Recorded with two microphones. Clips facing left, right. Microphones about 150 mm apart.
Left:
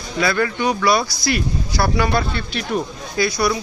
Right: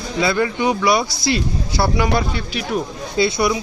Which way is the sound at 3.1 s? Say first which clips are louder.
Right 2 dB; 25° right (ahead or behind).